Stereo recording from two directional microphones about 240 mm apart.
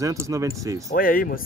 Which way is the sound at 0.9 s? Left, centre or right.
Left.